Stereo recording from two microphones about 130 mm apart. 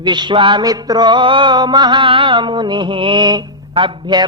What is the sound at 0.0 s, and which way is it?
Music, 35° right (ahead or behind).